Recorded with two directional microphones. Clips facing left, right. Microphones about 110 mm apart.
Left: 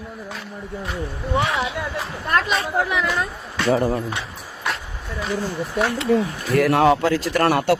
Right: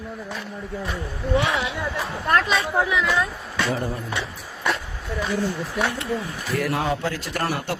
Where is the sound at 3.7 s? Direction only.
90° left.